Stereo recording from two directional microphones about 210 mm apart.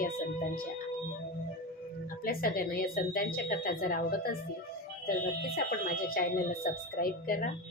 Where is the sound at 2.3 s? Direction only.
45° left (ahead or behind).